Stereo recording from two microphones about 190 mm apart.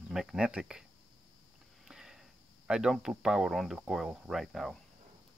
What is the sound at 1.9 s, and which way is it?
Speech, centre (ahead or behind).